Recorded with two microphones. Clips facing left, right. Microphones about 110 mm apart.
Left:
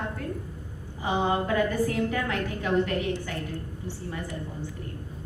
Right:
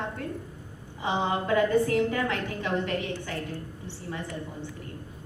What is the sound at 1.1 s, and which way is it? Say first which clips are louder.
Speech: left 1 dB; 25° right (ahead or behind).